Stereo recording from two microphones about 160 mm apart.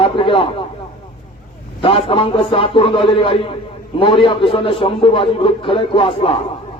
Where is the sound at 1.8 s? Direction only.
35° left (ahead or behind).